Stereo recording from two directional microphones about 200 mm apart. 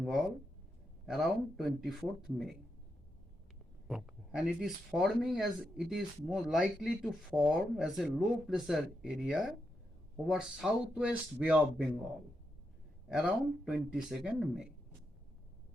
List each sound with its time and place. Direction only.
1.0 s speech: centre (ahead or behind)
3.8 s speech: 5° right (ahead or behind)
13.1 s speech: centre (ahead or behind)